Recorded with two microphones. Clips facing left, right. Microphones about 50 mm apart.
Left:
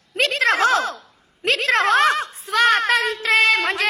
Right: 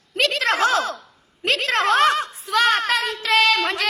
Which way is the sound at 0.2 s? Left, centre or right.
Left.